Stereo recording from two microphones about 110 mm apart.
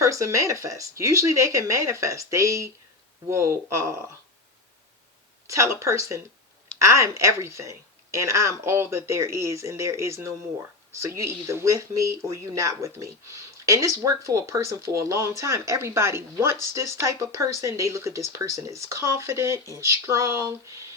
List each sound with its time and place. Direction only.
0.0 s speech: 30° right (ahead or behind)
5.5 s speech: 25° right (ahead or behind)